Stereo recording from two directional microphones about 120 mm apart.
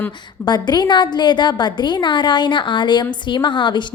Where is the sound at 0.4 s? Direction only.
35° left (ahead or behind).